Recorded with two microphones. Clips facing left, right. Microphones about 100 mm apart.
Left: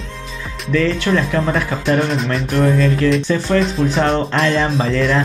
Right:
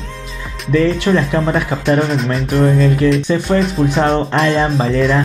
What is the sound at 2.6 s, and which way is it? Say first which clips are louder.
Speech: right 2 dB; 20° right (ahead or behind).